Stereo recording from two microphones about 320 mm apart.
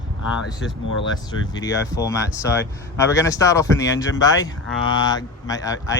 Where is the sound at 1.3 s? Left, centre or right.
Centre.